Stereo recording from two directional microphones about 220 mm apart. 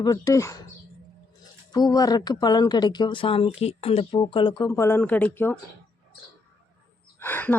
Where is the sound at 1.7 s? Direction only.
15° left (ahead or behind).